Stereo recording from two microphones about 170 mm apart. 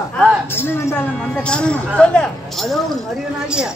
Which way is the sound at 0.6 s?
15° left (ahead or behind).